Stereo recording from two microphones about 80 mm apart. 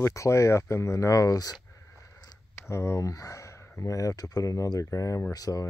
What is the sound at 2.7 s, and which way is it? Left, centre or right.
Speech, left.